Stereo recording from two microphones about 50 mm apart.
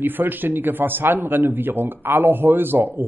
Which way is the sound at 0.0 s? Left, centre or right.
Right.